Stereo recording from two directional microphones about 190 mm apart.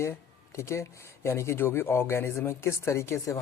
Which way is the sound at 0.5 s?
15° left (ahead or behind).